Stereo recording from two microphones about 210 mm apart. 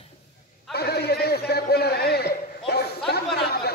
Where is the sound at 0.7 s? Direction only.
50° left (ahead or behind).